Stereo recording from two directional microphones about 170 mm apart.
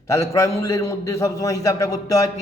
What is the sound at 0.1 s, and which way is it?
A man's voice, 20° left (ahead or behind).